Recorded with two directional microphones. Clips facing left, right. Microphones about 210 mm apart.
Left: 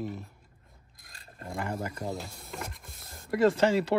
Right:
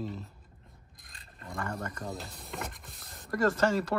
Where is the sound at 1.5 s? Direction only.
25° left (ahead or behind).